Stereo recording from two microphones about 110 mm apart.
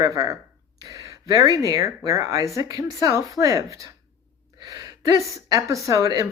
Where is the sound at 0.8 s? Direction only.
35° right (ahead or behind).